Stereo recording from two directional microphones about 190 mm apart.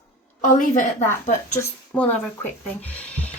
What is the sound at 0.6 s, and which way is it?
Speech, 40° left (ahead or behind).